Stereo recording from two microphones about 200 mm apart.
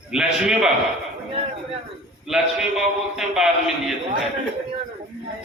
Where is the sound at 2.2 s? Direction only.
Centre (ahead or behind).